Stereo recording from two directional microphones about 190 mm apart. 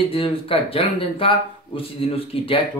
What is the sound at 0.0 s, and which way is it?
Speech, 30° left (ahead or behind).